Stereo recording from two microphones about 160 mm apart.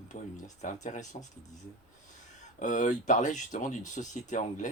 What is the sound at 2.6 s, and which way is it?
Speech, 50° left (ahead or behind).